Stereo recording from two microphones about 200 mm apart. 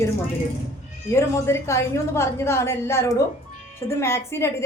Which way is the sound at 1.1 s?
15° left (ahead or behind).